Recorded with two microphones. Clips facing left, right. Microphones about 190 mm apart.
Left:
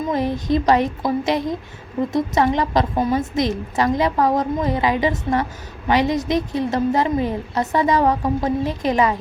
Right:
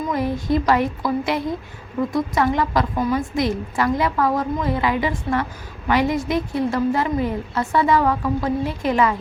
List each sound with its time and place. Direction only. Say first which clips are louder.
0.1 s a woman's voice: left 1 dB; 20° left (ahead or behind)